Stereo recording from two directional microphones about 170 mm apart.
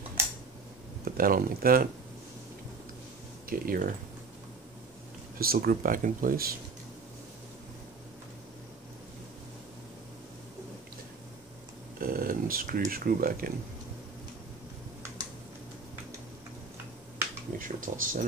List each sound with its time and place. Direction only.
1.0 s speech: 60° right (ahead or behind)
3.4 s speech: 55° right (ahead or behind)
5.4 s speech: 60° right (ahead or behind)
12.0 s speech: 60° right (ahead or behind)
17.6 s speech: 50° right (ahead or behind)